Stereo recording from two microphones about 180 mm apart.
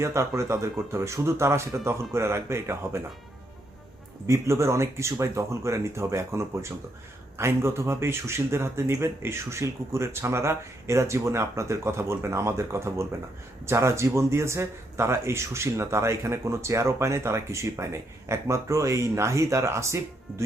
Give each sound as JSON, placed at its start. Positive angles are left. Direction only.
{"t": 0.0, "sound": "speech", "side_deg": -15}
{"t": 4.3, "sound": "speech", "side_deg": -15}